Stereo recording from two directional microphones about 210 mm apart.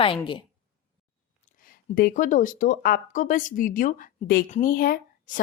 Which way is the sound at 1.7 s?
45° left (ahead or behind).